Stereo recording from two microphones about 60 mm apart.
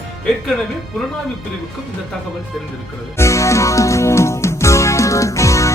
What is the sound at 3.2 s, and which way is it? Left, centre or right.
Music, left.